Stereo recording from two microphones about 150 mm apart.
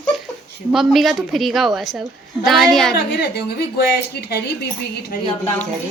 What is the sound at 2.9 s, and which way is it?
A woman's voice, 90° left.